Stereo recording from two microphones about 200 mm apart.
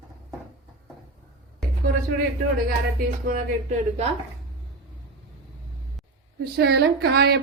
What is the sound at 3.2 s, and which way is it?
Speech, 40° right (ahead or behind).